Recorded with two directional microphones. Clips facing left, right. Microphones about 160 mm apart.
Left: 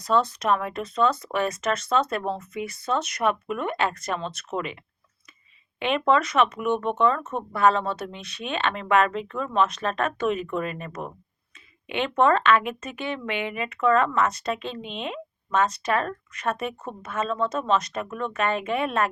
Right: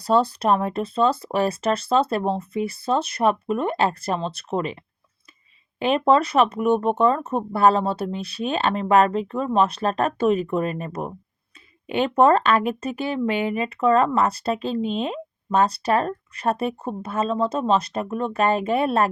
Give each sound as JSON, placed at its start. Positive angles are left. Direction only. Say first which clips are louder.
{"t": 0.0, "sound": "speech", "louder": "right 4 dB", "side_deg": -35}
{"t": 5.8, "sound": "speech", "louder": "right 4 dB", "side_deg": -35}